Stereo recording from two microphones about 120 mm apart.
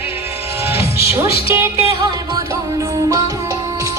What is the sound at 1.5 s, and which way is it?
Music, 25° right (ahead or behind).